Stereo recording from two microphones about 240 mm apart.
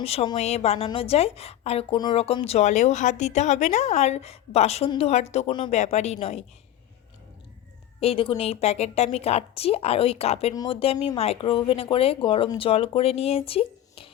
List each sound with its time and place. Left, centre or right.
0.0 s a woman's voice: left
8.0 s a woman's voice: left